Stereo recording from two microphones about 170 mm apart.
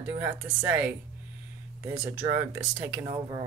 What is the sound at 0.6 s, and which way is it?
Speech, 10° right (ahead or behind).